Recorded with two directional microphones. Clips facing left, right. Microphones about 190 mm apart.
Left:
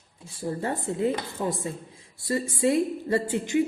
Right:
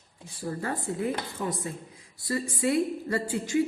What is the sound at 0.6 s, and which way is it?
Speech, 25° left (ahead or behind).